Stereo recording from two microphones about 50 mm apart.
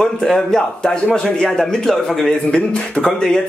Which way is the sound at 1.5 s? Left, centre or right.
Centre.